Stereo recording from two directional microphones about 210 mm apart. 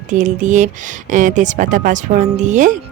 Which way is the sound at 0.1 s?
35° right (ahead or behind).